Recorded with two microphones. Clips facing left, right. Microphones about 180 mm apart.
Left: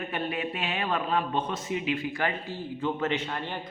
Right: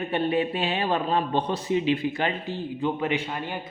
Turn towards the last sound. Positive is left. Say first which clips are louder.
# right 2 dB
turn(degrees=-10)  # may be behind; listen again after turning